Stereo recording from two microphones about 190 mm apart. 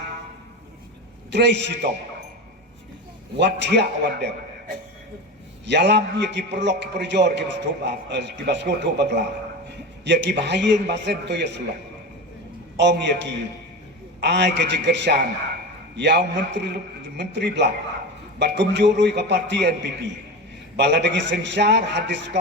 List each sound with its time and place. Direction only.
1.3 s a man's voice: 65° right (ahead or behind)
3.3 s a man's voice: 65° right (ahead or behind)
5.6 s a man's voice: 65° right (ahead or behind)
12.7 s a man's voice: 65° right (ahead or behind)